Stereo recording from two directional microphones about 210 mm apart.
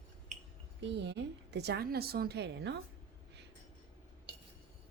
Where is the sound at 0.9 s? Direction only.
55° right (ahead or behind).